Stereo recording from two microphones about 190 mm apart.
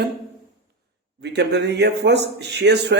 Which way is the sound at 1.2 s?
65° right (ahead or behind).